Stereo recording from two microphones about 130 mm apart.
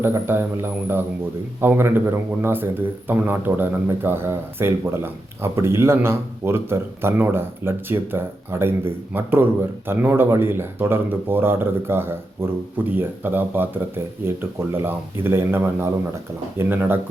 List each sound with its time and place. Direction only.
0.0 s a man's voice: 20° right (ahead or behind)